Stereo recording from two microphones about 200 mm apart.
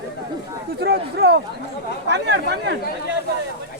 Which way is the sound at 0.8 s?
55° right (ahead or behind).